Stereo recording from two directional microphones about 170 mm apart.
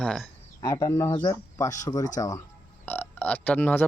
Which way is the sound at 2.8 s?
10° left (ahead or behind).